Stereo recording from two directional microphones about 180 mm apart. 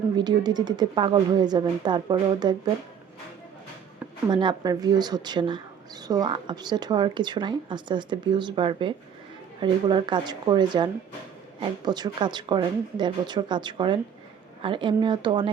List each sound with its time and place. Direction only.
0.2 s speech: 25° right (ahead or behind)
4.3 s speech: 25° right (ahead or behind)
11.9 s speech: 25° right (ahead or behind)